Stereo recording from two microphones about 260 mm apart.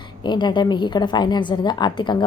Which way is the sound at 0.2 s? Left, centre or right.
Centre.